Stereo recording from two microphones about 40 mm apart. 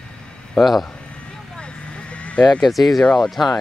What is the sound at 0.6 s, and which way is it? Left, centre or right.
Speech, centre.